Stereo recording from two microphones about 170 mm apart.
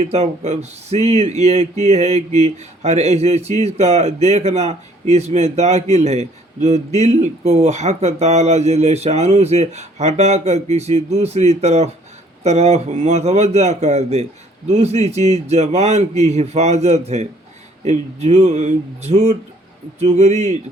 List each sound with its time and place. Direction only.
0.0 s speech: 40° right (ahead or behind)